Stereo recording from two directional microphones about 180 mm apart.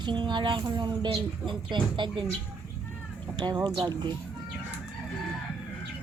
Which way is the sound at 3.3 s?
25° right (ahead or behind).